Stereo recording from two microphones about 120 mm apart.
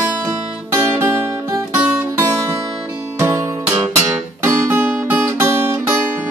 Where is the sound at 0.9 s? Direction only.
20° right (ahead or behind).